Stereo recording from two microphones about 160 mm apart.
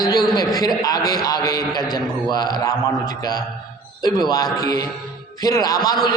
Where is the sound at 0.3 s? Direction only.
25° left (ahead or behind).